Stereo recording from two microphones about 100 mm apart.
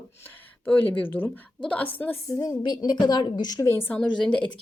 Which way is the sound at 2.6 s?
45° left (ahead or behind).